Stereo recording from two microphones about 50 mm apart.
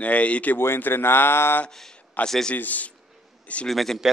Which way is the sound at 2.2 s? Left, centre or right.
Left.